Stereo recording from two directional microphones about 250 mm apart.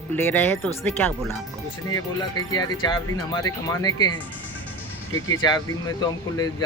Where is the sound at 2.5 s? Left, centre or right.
Centre.